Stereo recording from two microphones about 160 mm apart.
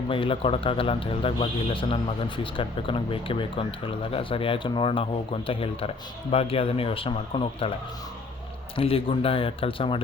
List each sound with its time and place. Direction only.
0.1 s speech: 35° left (ahead or behind)
8.7 s speech: 35° left (ahead or behind)